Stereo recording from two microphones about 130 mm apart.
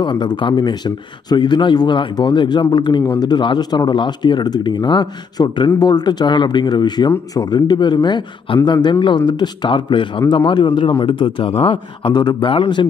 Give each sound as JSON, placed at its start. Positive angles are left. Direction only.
{"t": 0.0, "sound": "speech", "side_deg": 35}